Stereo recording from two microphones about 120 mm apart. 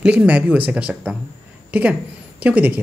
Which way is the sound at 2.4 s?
10° right (ahead or behind).